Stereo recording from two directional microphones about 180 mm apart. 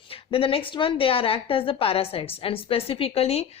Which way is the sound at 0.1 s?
30° left (ahead or behind).